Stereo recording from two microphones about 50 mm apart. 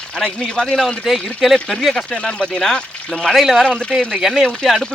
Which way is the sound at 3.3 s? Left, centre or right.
Centre.